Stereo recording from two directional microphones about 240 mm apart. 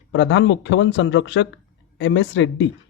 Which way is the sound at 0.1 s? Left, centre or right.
Left.